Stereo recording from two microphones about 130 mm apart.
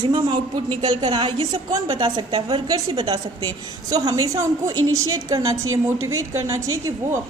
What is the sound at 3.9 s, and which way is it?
A woman's voice, 30° right (ahead or behind).